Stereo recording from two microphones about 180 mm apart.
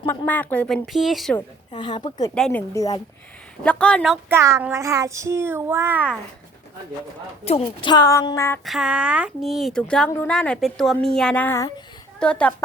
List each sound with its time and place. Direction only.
0.0 s a woman's voice: 10° left (ahead or behind)
1.7 s a woman's voice: 25° left (ahead or behind)
2.3 s speech: 5° left (ahead or behind)
3.6 s a woman's voice: 5° left (ahead or behind)
4.3 s child singing: 15° right (ahead or behind)
7.4 s a woman's voice: 30° left (ahead or behind)
8.6 s a woman's voice: centre (ahead or behind)